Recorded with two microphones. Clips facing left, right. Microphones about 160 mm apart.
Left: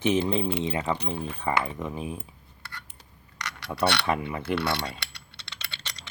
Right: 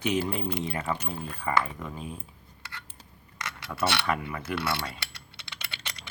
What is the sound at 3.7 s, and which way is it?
Speech, 20° left (ahead or behind).